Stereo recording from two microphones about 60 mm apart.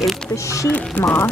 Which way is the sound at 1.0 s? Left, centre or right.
Left.